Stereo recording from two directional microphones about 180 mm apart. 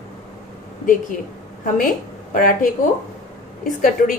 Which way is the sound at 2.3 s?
50° left (ahead or behind).